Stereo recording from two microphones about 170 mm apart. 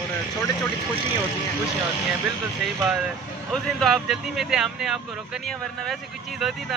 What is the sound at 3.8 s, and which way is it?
Speech, centre (ahead or behind).